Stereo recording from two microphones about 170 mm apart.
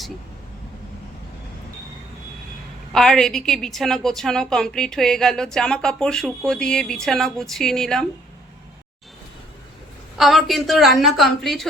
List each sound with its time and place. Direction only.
2.9 s a woman's voice: 5° left (ahead or behind)
10.2 s a woman's voice: centre (ahead or behind)